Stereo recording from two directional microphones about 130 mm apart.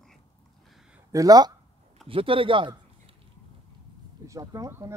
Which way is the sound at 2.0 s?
45° right (ahead or behind).